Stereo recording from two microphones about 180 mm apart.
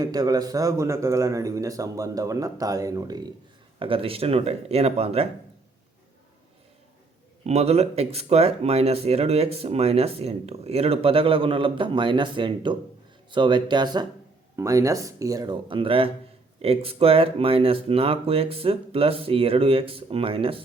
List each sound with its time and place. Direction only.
0.0 s a man's voice: 20° right (ahead or behind)
7.4 s a man's voice: 35° right (ahead or behind)